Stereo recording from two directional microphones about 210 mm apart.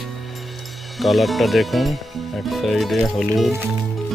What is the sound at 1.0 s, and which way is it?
Speech, centre (ahead or behind).